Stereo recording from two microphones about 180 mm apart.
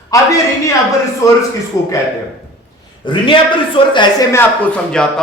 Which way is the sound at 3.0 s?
25° left (ahead or behind).